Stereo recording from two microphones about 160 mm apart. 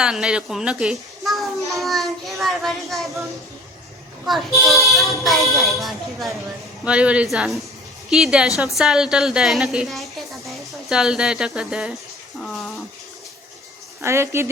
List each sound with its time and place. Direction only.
0.0 s a woman's voice: 5° right (ahead or behind)
4.3 s a woman's voice: centre (ahead or behind)
14.0 s speech: 15° right (ahead or behind)